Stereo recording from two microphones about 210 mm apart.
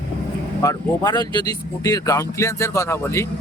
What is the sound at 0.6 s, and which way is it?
Speech, 15° left (ahead or behind).